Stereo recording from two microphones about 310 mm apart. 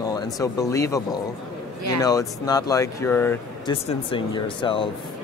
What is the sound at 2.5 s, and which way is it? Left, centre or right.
Speech, centre.